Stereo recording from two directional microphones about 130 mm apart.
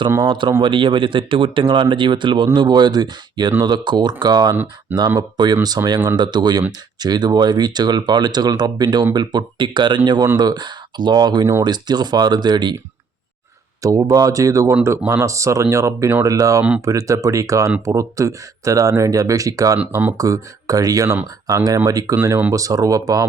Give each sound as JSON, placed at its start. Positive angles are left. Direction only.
{"t": 0.3, "sound": "speech", "side_deg": -40}
{"t": 4.5, "sound": "speech", "side_deg": -15}
{"t": 4.9, "sound": "speech", "side_deg": -30}
{"t": 13.8, "sound": "speech", "side_deg": -25}
{"t": 19.9, "sound": "speech", "side_deg": -15}
{"t": 20.1, "sound": "speech", "side_deg": -25}